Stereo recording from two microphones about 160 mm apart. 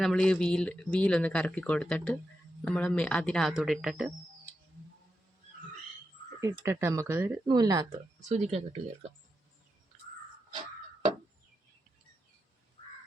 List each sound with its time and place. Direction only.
0.0 s speech: 5° left (ahead or behind)
6.4 s speech: 20° right (ahead or behind)
8.2 s speech: 45° right (ahead or behind)